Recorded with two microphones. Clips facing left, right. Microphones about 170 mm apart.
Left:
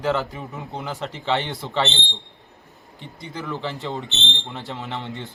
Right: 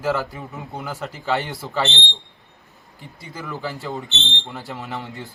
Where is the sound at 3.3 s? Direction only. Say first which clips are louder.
Left 1 dB; 5° right (ahead or behind).